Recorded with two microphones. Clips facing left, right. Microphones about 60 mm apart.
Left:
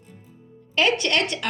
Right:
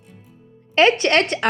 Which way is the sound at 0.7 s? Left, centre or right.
Right.